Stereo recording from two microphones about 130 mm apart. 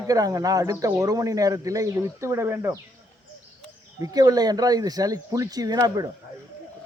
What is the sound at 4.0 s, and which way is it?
A man's voice, 30° right (ahead or behind).